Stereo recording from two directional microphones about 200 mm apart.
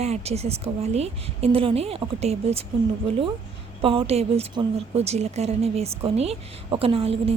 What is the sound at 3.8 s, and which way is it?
A woman's voice, 30° right (ahead or behind).